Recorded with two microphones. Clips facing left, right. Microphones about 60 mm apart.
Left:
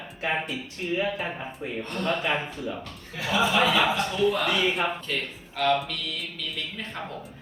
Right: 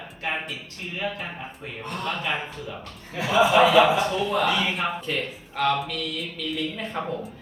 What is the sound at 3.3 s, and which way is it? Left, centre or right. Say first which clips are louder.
Speech: right 6 dB; centre.